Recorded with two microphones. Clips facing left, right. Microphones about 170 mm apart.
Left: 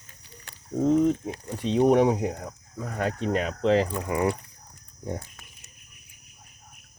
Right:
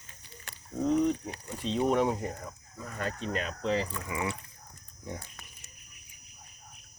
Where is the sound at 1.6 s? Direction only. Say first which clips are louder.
Left 7 dB; 55° left (ahead or behind); by 4.0 s 75° left (ahead or behind).